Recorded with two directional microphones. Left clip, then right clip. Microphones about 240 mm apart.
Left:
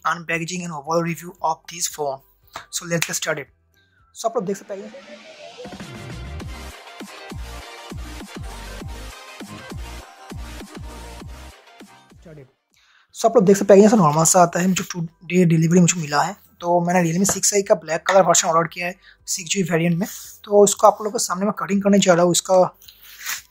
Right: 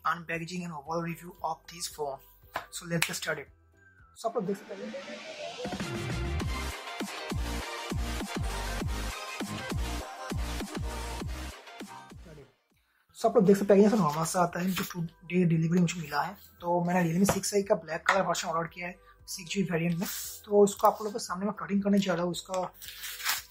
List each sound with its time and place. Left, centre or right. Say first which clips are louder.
0.0 s speech: left 9 dB; left
4.6 s music: left 6 dB; centre
13.2 s speech: left 9 dB; left